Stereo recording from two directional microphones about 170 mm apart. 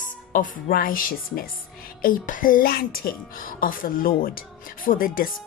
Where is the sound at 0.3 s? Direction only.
55° left (ahead or behind).